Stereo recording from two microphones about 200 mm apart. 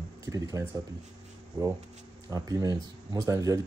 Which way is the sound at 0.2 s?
15° right (ahead or behind).